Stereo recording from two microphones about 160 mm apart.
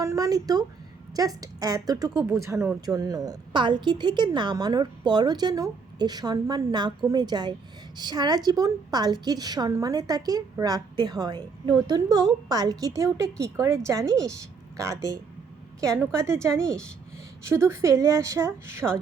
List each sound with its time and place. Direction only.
0.0 s a sound: 20° right (ahead or behind)
1.1 s a woman's voice: 25° right (ahead or behind)
16.5 s speech: 5° left (ahead or behind)
17.4 s a woman's voice: 15° right (ahead or behind)